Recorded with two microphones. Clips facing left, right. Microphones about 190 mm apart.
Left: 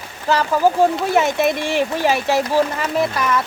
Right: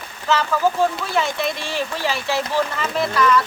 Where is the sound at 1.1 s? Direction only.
50° left (ahead or behind).